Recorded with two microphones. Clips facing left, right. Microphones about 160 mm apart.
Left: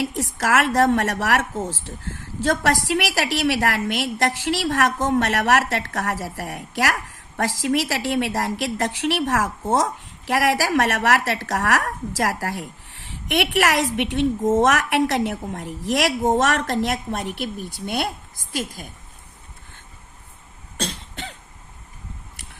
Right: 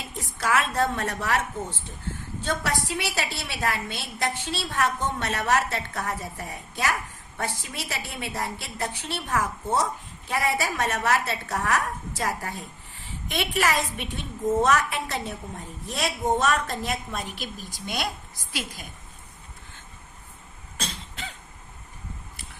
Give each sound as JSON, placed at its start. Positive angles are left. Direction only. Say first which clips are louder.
{"t": 0.0, "sound": "a woman's voice", "louder": "left 7 dB", "side_deg": 80}
{"t": 20.7, "sound": "cough", "louder": "left 6 dB", "side_deg": 35}